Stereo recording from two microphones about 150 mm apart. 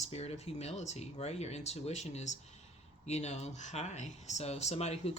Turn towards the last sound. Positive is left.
turn(degrees=45)  # may be behind; listen again after turning